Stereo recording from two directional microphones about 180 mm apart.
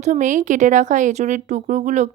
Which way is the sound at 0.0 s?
40° right (ahead or behind).